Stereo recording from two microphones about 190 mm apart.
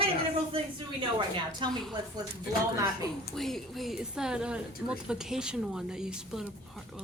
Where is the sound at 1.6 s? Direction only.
25° right (ahead or behind).